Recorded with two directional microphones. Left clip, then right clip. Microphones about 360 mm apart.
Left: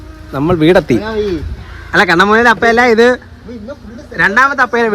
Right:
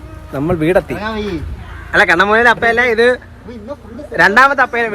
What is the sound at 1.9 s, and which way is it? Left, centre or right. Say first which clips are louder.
Speech: left 1 dB; centre.